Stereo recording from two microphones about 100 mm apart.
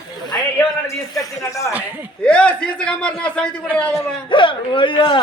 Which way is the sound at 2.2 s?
10° left (ahead or behind).